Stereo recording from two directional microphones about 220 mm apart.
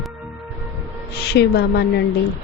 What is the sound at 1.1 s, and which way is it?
Speech, 50° left (ahead or behind).